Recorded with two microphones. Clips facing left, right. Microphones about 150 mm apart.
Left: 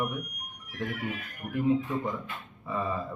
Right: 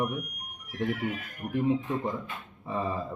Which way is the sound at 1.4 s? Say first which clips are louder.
Left 1 dB; 25° right (ahead or behind).